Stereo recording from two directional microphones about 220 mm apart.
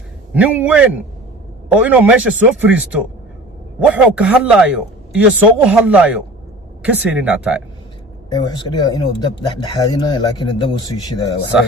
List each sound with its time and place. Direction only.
0.3 s speech: 5° right (ahead or behind)
8.3 s speech: 20° left (ahead or behind)